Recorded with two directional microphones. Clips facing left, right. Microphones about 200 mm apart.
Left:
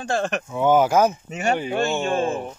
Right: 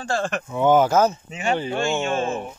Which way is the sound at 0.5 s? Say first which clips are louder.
Right 1 dB; 5° left (ahead or behind).